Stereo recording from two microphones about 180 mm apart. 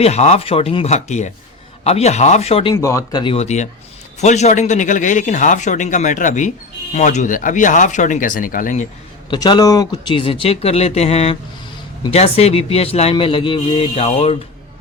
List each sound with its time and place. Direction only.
0.0 s a man's voice: 35° left (ahead or behind)
2.7 s speech: 15° left (ahead or behind); by 8.9 s 45° left (ahead or behind)
9.3 s a man's voice: 25° left (ahead or behind)